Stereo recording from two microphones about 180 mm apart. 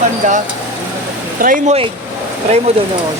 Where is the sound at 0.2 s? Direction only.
45° right (ahead or behind).